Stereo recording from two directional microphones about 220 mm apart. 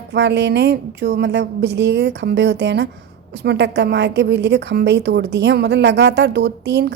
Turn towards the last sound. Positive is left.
turn(degrees=-50)  # may be behind; listen again after turning